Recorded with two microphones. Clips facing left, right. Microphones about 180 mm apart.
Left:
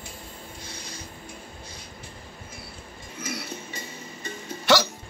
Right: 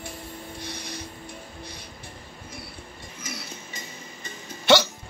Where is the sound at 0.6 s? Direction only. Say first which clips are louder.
Right 6 dB; 65° right (ahead or behind).